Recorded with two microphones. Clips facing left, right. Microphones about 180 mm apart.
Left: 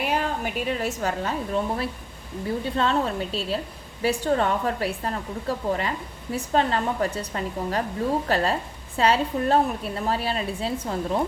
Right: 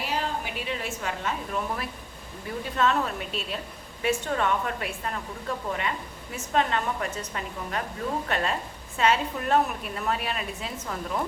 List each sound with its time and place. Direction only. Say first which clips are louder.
0.0 s a woman's voice: left 4 dB; 50° left (ahead or behind); by 11.2 s 30° left (ahead or behind)